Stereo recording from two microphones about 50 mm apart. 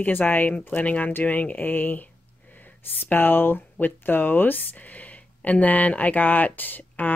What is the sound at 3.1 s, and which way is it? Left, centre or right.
Speech, left.